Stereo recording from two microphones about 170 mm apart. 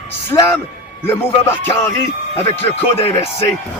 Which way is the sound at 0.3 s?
15° left (ahead or behind).